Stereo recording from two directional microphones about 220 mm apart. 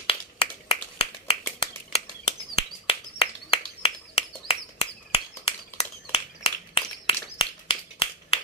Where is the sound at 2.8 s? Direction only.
25° left (ahead or behind).